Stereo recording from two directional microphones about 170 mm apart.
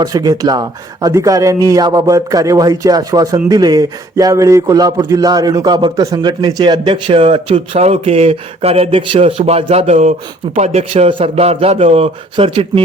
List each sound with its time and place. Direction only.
0.0 s speech: 20° right (ahead or behind)